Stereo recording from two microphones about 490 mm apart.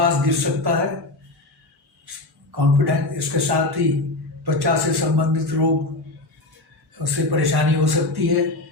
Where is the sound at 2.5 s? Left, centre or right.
Right.